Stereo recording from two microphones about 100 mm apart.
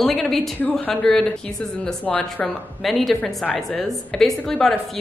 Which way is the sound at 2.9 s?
Centre (ahead or behind).